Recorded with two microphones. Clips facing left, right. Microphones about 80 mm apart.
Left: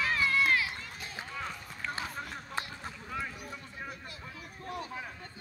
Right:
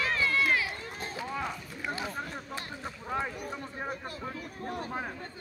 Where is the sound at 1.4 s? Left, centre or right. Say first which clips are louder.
Right 3 dB; centre.